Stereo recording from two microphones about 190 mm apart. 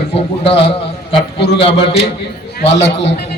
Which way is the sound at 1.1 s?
30° left (ahead or behind).